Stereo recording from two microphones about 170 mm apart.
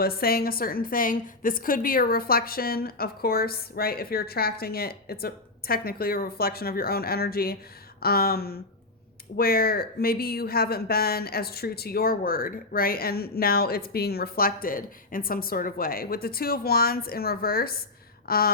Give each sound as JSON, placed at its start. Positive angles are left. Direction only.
{"t": 0.0, "sound": "speech", "side_deg": 65}